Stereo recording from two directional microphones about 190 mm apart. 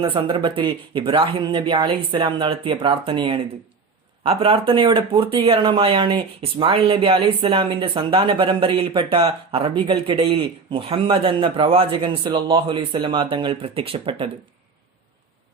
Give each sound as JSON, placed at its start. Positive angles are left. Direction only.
{"t": 0.0, "sound": "speech", "side_deg": -25}